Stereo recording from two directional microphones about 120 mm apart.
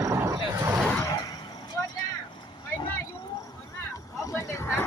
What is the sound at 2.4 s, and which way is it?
Vehicle, 40° left (ahead or behind).